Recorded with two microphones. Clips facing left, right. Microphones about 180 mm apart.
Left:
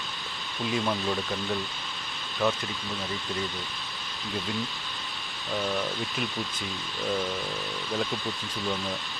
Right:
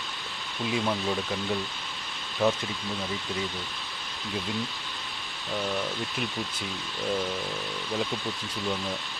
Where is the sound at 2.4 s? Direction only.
20° right (ahead or behind).